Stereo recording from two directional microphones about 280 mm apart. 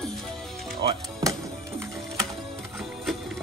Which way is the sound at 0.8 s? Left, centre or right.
Centre.